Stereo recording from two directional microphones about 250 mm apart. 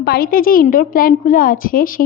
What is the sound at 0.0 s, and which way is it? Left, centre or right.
A woman's voice, left.